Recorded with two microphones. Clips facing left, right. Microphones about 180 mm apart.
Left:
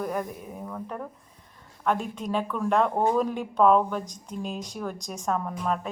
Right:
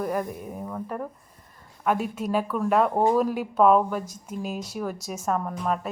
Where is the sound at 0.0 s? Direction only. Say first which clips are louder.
Right 2 dB; 5° right (ahead or behind).